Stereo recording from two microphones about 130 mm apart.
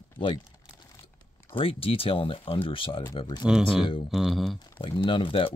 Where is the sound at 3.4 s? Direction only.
5° right (ahead or behind).